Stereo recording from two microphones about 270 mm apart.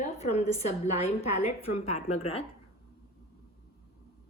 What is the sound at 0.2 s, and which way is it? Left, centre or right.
A woman's voice, left.